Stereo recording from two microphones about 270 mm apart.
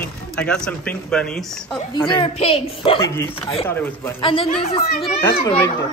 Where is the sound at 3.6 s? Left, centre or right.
Centre.